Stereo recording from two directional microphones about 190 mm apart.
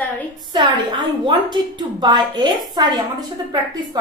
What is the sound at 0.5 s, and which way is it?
A woman's voice, 25° right (ahead or behind).